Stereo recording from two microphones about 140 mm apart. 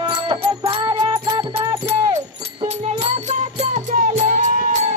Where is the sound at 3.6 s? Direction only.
60° right (ahead or behind).